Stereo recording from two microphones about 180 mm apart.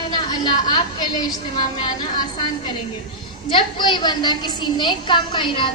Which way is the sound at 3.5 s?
25° left (ahead or behind).